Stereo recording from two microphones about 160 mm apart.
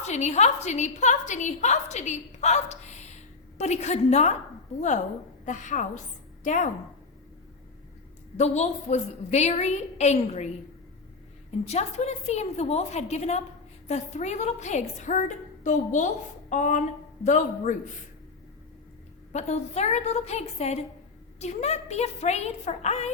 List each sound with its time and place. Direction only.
0.0 s a woman's voice: 45° left (ahead or behind)
5.5 s a woman's voice: 50° left (ahead or behind)
8.4 s a woman's voice: 45° left (ahead or behind)
11.6 s a woman's voice: 40° left (ahead or behind)
19.3 s a woman's voice: 45° left (ahead or behind)